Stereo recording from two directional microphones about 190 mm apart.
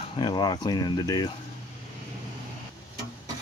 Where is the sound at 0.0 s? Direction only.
25° left (ahead or behind).